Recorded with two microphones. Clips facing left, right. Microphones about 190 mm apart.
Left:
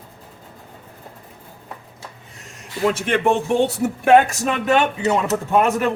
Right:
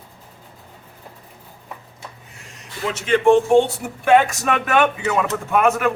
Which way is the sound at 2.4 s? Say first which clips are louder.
Left 6 dB; 50° left (ahead or behind).